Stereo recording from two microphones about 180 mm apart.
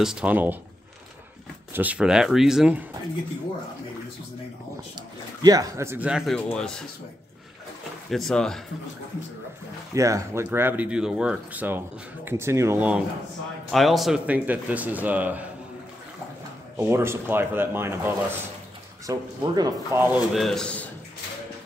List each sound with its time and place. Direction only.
0.0 s speech: 5° right (ahead or behind)
1.7 s speech: 10° right (ahead or behind)
4.9 s speech: 20° right (ahead or behind); by 6.7 s 5° left (ahead or behind)
8.1 s speech: centre (ahead or behind)
9.9 s speech: 15° right (ahead or behind)
16.7 s speech: 15° right (ahead or behind)
20.3 s speech: centre (ahead or behind)